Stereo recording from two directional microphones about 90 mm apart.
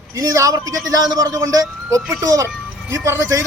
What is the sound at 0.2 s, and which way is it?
Speech, 35° right (ahead or behind).